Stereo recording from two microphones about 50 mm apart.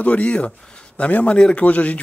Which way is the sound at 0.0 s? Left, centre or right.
Left.